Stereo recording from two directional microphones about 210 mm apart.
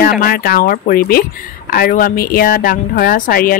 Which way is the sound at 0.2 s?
45° left (ahead or behind).